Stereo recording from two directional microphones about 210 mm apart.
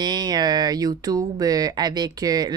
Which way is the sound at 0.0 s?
20° right (ahead or behind).